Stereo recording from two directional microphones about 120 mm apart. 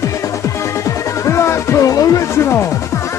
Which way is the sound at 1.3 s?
25° left (ahead or behind).